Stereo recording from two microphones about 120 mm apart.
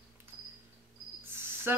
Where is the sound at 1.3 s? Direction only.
20° right (ahead or behind).